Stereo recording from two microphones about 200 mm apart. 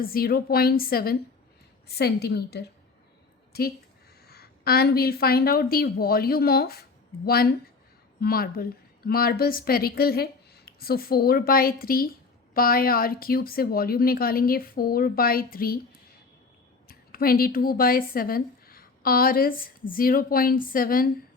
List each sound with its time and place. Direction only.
0.0 s speech: 50° left (ahead or behind)
16.9 s a woman's voice: 45° left (ahead or behind)